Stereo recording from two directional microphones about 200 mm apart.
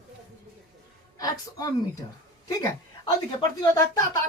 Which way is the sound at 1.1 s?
20° left (ahead or behind).